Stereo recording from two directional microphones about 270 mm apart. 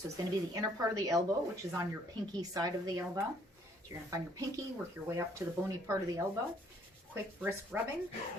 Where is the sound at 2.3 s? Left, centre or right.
Centre.